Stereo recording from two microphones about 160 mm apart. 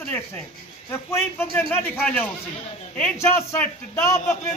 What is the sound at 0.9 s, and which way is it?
A man's voice, 15° left (ahead or behind).